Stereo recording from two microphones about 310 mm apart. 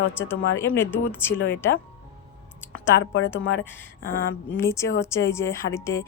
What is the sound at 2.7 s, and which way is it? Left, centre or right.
Speech, left.